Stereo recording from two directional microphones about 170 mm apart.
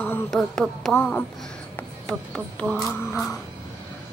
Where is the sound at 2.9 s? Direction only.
15° left (ahead or behind).